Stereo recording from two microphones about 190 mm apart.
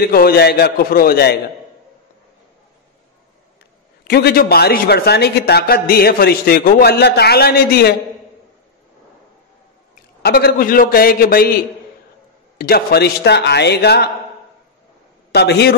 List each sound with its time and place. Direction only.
0.0 s a man's voice: 55° left (ahead or behind)
4.1 s a man's voice: 55° left (ahead or behind)
10.2 s a man's voice: 55° left (ahead or behind)
15.3 s a man's voice: 60° left (ahead or behind)